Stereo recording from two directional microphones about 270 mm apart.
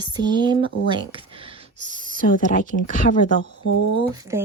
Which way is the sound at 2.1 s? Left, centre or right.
Left.